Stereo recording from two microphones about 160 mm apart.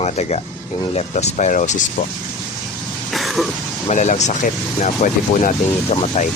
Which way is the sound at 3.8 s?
45° left (ahead or behind).